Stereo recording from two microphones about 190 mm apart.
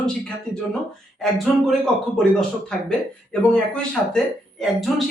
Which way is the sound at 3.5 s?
5° left (ahead or behind).